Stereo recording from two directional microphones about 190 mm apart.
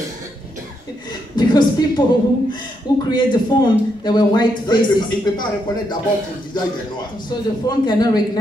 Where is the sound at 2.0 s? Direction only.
25° left (ahead or behind).